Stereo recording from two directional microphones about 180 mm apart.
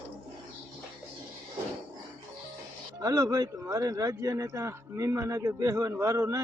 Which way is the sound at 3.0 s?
20° right (ahead or behind).